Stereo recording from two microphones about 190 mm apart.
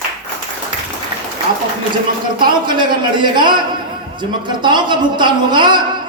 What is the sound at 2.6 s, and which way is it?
A man's voice, 25° right (ahead or behind).